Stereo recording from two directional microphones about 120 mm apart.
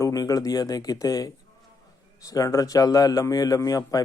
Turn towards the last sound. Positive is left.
turn(degrees=30)  # may be behind; listen again after turning